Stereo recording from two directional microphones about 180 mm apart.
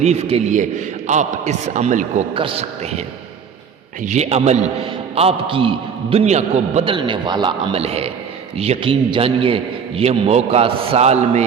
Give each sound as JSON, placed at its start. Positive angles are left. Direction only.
{"t": 0.0, "sound": "a man's voice", "side_deg": -35}
{"t": 2.3, "sound": "a man's voice", "side_deg": -30}
{"t": 4.0, "sound": "a man's voice", "side_deg": -40}